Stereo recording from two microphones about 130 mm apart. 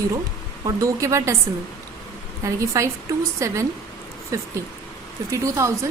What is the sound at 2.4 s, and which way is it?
A woman's voice, 25° right (ahead or behind).